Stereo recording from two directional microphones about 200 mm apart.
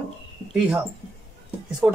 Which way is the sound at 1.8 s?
5° right (ahead or behind).